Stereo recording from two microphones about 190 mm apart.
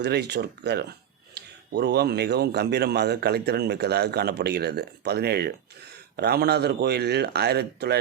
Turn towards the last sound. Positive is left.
turn(degrees=-60)  # may be behind; listen again after turning